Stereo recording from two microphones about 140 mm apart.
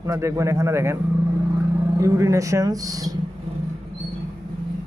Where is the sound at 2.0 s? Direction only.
20° right (ahead or behind).